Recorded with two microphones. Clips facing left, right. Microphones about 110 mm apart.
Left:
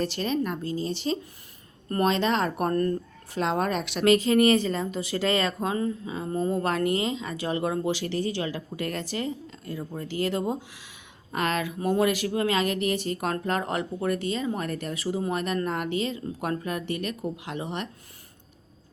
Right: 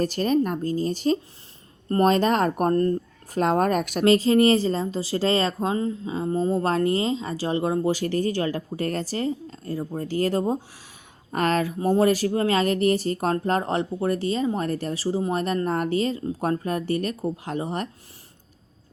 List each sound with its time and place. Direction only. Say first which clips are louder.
0.0 s speech: right 5 dB; 45° right (ahead or behind)
3.3 s speech: right 5 dB; 45° right (ahead or behind)
4.0 s speech: right 2 dB; 30° right (ahead or behind)
7.9 s speech: right 4 dB; 45° right (ahead or behind)